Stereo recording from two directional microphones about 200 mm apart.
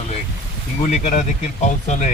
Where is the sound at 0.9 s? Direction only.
40° left (ahead or behind).